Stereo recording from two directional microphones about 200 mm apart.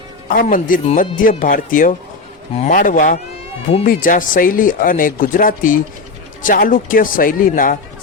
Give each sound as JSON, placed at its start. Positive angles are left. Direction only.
{"t": 0.3, "sound": "speech", "side_deg": 45}